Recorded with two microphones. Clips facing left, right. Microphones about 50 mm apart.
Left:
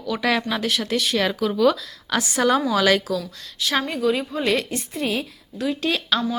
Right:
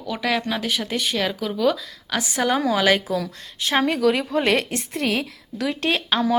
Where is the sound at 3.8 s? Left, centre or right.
Right.